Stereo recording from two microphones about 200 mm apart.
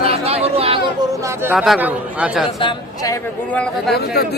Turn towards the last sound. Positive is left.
turn(degrees=50)  # may be behind; listen again after turning